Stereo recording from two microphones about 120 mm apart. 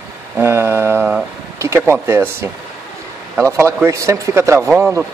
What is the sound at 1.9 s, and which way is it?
Speech, 20° right (ahead or behind).